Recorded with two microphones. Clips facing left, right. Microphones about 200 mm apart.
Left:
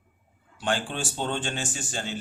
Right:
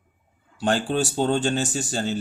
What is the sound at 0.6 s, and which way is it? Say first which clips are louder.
Speech: right 6 dB; 40° right (ahead or behind).